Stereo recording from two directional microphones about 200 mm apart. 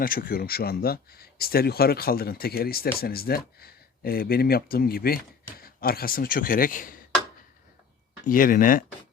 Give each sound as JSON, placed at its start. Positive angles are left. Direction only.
{"t": 0.0, "sound": "speech", "side_deg": 45}
{"t": 8.2, "sound": "speech", "side_deg": 45}